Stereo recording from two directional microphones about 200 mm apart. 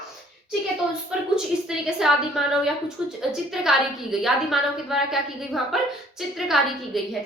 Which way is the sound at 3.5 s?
Centre (ahead or behind).